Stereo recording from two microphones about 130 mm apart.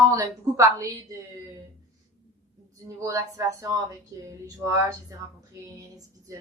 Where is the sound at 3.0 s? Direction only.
25° right (ahead or behind).